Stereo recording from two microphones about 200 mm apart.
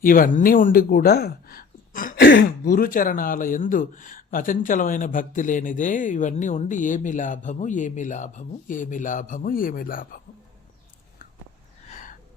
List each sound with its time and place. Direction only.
0.0 s speech: 45° left (ahead or behind)
2.2 s speech: 55° left (ahead or behind)
11.9 s gasp: 35° left (ahead or behind)